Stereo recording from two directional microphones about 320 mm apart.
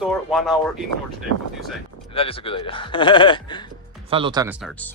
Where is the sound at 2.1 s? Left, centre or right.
Centre.